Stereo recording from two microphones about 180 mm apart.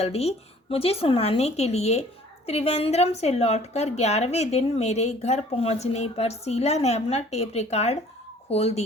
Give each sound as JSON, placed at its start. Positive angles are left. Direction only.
{"t": 0.0, "sound": "a woman's voice", "side_deg": 35}